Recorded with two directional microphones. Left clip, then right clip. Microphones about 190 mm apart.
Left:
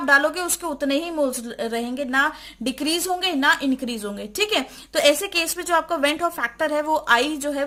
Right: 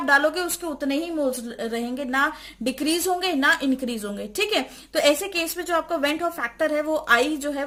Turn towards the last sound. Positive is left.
turn(degrees=25)  # may be behind; listen again after turning